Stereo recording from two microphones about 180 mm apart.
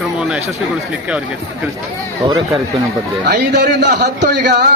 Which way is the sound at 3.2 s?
70° right (ahead or behind).